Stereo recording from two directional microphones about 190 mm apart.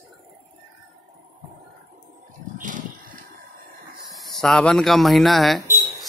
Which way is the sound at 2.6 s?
45° right (ahead or behind).